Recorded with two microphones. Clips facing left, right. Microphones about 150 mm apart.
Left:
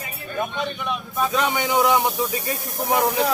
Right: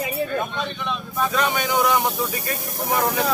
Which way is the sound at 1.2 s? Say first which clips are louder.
Even; 15° left (ahead or behind).